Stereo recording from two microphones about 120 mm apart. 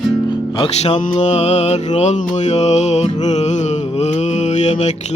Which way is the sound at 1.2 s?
70° left (ahead or behind).